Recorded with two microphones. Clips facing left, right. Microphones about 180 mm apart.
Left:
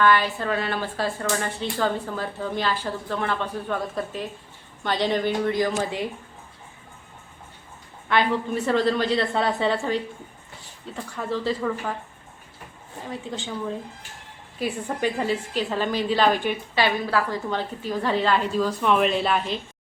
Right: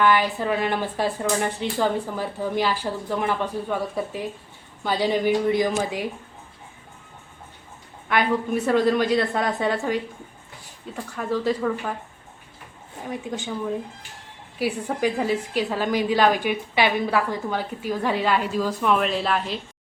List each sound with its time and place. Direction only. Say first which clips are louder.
0.0 s a woman's voice: right 1 dB; 15° right (ahead or behind)
8.7 s a woman's voice: right 2 dB; 10° right (ahead or behind)
13.1 s a woman's voice: right 3 dB; 15° right (ahead or behind)
14.6 s a woman's voice: right 2 dB; 10° right (ahead or behind)